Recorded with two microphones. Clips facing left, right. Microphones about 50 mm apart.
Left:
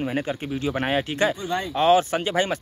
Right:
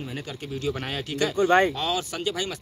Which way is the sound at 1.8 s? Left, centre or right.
Left.